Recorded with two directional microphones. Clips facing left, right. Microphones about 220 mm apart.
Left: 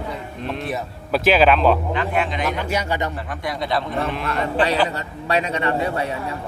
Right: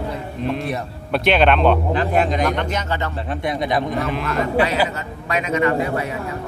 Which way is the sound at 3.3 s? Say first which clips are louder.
Right 7 dB; 20° right (ahead or behind).